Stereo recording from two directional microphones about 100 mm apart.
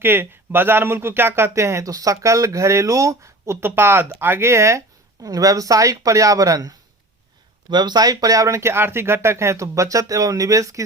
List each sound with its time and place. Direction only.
0.0 s speech: 20° right (ahead or behind)